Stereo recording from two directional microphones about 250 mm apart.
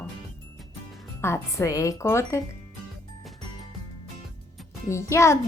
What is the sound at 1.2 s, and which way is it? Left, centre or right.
Speech, centre.